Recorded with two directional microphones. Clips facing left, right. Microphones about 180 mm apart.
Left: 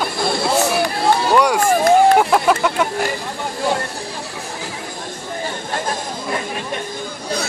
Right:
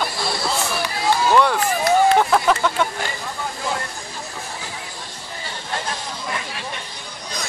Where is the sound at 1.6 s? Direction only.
50° left (ahead or behind).